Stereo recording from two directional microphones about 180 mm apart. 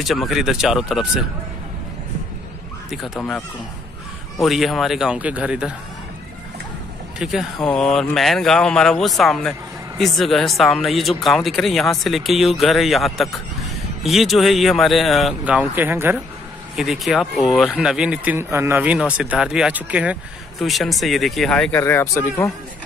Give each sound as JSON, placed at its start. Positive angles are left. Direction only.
{"t": 0.0, "sound": "speech", "side_deg": 0}
{"t": 3.2, "sound": "speech", "side_deg": 5}
{"t": 7.2, "sound": "speech", "side_deg": -5}
{"t": 16.7, "sound": "speech", "side_deg": 0}